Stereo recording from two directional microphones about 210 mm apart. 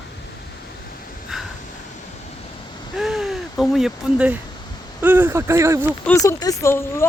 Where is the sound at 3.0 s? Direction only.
Centre (ahead or behind).